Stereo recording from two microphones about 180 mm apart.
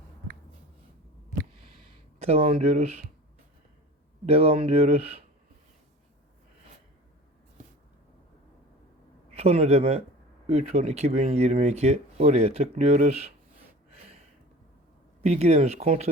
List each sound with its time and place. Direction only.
2.1 s speech: 35° right (ahead or behind)
4.3 s speech: 35° right (ahead or behind)
9.3 s a man's voice: 35° right (ahead or behind)
15.2 s speech: 35° right (ahead or behind)